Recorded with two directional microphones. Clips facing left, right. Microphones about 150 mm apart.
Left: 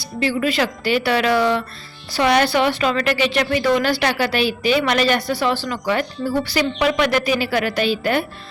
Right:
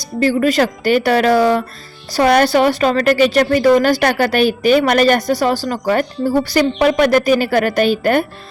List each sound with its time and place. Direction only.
0.0 s a woman's voice: 45° right (ahead or behind)